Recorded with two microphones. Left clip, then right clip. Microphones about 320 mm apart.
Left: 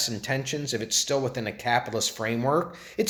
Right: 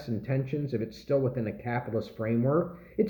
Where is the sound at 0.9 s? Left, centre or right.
Centre.